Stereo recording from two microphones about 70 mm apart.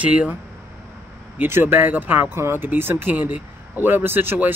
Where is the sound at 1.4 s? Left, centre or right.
Right.